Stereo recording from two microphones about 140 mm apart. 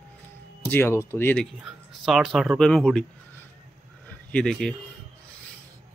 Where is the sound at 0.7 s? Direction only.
20° left (ahead or behind).